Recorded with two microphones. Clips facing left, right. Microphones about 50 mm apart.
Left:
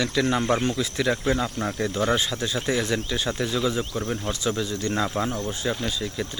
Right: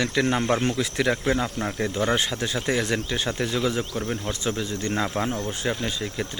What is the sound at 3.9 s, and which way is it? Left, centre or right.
Speech, centre.